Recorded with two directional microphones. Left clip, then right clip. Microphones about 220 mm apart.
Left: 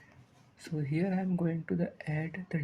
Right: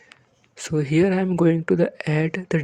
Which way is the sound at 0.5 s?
50° right (ahead or behind).